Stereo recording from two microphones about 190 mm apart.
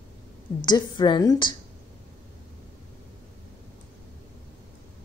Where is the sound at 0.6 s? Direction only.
20° left (ahead or behind).